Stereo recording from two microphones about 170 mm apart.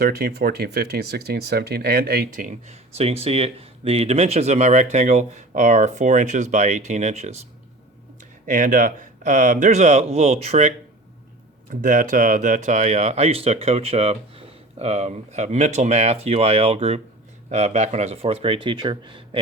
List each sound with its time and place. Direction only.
0.0 s speech: 70° right (ahead or behind); by 10.8 s 40° right (ahead or behind)
11.7 s speech: 50° right (ahead or behind); by 19.4 s 25° right (ahead or behind)